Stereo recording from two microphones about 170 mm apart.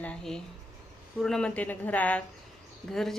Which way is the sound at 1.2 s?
5° left (ahead or behind).